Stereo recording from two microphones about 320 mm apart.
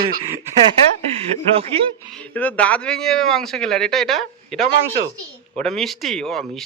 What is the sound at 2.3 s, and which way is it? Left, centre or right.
Speech, centre.